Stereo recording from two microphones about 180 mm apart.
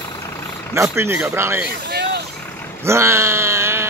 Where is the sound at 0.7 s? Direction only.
15° right (ahead or behind).